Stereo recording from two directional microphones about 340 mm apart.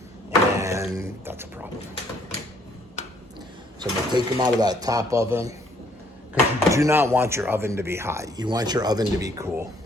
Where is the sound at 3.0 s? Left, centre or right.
Centre.